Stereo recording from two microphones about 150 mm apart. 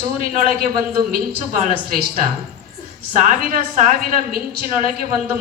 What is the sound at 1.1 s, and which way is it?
A woman's voice, 70° right (ahead or behind).